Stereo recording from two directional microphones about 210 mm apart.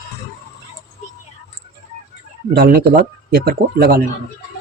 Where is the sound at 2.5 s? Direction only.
50° right (ahead or behind).